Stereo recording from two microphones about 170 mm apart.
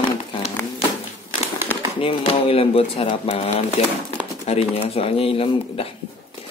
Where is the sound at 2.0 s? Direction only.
35° left (ahead or behind).